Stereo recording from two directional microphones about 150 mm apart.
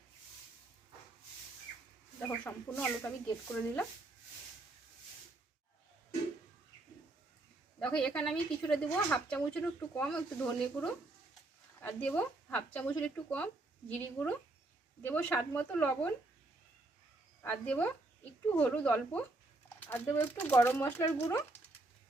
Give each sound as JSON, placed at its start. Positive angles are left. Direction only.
{"t": 2.2, "sound": "speech", "side_deg": 15}
{"t": 7.8, "sound": "speech", "side_deg": 5}
{"t": 17.4, "sound": "speech", "side_deg": 10}